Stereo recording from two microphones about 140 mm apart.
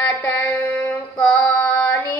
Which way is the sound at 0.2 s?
10° left (ahead or behind).